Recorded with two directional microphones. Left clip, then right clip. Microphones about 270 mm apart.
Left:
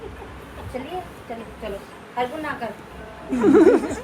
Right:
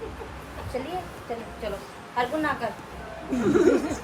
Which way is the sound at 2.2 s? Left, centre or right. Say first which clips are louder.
Even; centre.